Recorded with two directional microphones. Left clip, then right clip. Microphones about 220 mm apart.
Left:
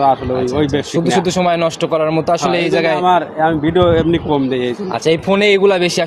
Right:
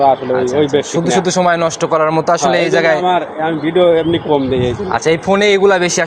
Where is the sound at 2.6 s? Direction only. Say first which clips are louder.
Right 3 dB; 30° left (ahead or behind).